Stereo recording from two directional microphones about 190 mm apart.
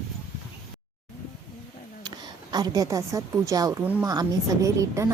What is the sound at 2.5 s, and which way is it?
A woman's voice, 20° right (ahead or behind).